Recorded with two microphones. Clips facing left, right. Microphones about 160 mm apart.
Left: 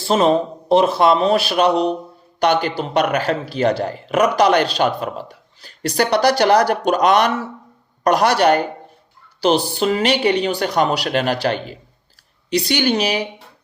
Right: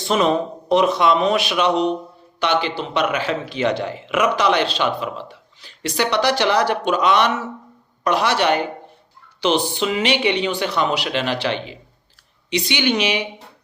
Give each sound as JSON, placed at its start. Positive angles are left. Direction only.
{"t": 0.0, "sound": "speech", "side_deg": 30}
{"t": 9.7, "sound": "speech", "side_deg": 40}